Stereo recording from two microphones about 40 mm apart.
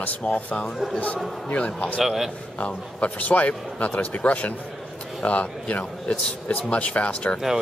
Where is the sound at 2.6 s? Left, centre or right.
Left.